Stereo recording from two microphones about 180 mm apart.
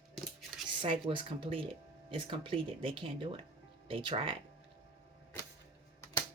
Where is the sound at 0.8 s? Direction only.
30° right (ahead or behind).